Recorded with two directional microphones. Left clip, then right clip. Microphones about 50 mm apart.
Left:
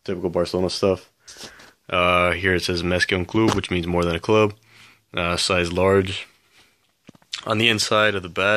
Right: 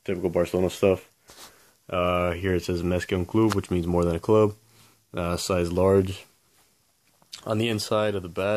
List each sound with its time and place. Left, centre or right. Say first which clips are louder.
0.1 s speech: left 2 dB; left
0.8 s speech: left 1 dB; left
2.7 s speech: left 6 dB; centre
3.6 s speech: left 3 dB; right
7.2 s speech: left 8 dB; centre